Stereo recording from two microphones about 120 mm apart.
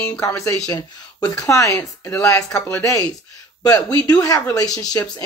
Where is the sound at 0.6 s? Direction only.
30° left (ahead or behind).